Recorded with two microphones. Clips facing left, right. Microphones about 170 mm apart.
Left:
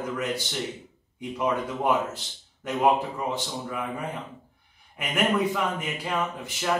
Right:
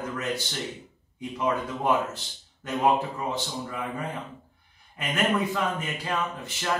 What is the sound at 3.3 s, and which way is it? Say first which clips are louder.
Speech: left 1 dB; 10° left (ahead or behind).